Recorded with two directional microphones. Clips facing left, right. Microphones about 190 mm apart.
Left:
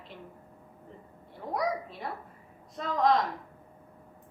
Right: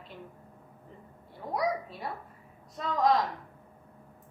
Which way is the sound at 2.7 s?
Centre (ahead or behind).